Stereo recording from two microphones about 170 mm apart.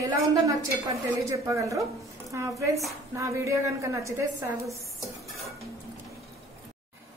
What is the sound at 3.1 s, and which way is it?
Dishes, 15° right (ahead or behind).